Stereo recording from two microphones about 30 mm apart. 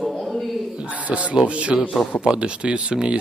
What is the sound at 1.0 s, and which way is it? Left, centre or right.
Speech, right.